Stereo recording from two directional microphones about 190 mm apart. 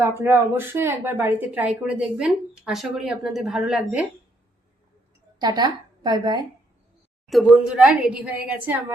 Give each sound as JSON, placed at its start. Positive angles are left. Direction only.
{"t": 0.0, "sound": "a woman's voice", "side_deg": -10}
{"t": 5.4, "sound": "a woman's voice", "side_deg": -20}
{"t": 7.3, "sound": "a woman's voice", "side_deg": 0}